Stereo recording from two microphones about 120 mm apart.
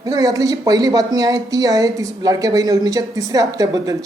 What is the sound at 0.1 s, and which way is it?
Speech, 30° right (ahead or behind).